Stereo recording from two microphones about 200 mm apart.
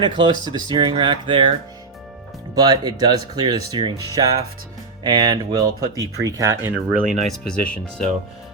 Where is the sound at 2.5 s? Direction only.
20° right (ahead or behind).